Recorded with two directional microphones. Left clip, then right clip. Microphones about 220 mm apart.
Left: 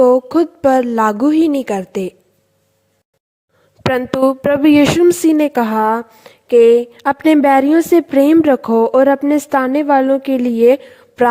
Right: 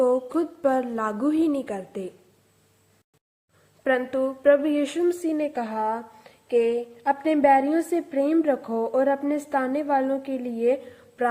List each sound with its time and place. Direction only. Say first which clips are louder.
0.0 s a woman's voice: left 11 dB; 35° left (ahead or behind)
3.9 s speech: left 13 dB; 45° left (ahead or behind)